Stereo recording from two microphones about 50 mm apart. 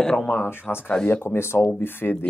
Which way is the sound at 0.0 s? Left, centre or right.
Centre.